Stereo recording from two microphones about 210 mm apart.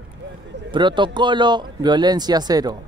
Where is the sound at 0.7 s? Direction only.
20° right (ahead or behind).